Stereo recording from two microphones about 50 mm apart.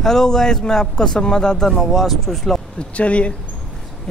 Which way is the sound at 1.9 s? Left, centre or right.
Centre.